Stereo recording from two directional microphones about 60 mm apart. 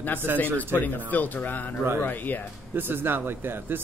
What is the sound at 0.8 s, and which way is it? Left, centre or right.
Speech, left.